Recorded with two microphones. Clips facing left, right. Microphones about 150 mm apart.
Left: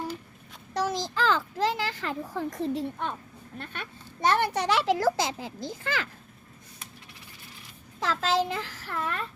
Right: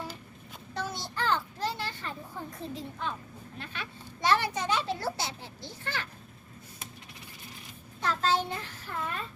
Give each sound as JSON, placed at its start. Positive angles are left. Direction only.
{"t": 0.7, "sound": "a child's voice", "side_deg": 90}
{"t": 3.6, "sound": "a child's voice", "side_deg": 50}
{"t": 7.9, "sound": "a child's voice", "side_deg": 90}